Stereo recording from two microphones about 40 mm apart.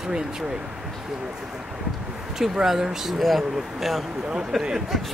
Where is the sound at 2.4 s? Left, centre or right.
Centre.